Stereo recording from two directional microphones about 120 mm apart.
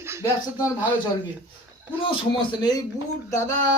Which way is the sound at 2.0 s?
45° left (ahead or behind).